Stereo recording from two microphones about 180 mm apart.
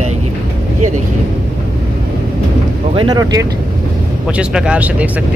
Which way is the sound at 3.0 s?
20° right (ahead or behind).